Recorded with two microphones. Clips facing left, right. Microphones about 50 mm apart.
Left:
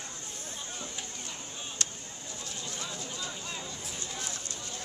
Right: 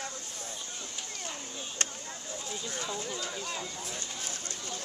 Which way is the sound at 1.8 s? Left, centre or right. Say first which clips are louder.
Right 3 dB; right.